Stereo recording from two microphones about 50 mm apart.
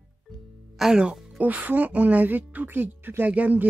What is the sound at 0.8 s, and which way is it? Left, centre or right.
Speech, centre.